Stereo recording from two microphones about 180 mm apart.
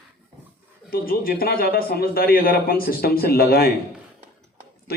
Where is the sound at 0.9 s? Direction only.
55° left (ahead or behind).